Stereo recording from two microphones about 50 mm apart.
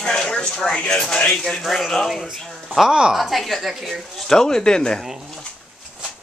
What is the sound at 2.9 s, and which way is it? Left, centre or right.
Speech, centre.